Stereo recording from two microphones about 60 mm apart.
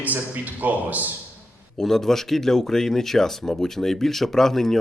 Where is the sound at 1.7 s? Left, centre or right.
Centre.